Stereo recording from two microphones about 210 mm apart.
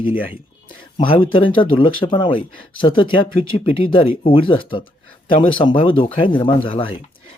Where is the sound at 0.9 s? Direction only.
25° left (ahead or behind).